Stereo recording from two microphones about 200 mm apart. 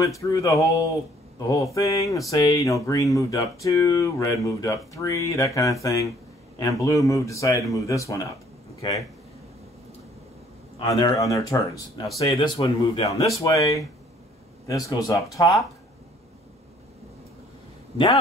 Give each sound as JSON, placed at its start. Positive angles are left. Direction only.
{"t": 0.0, "sound": "speech", "side_deg": 15}
{"t": 10.8, "sound": "speech", "side_deg": 20}
{"t": 12.3, "sound": "speech", "side_deg": 25}